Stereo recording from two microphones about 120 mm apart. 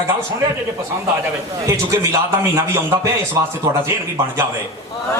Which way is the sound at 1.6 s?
25° right (ahead or behind).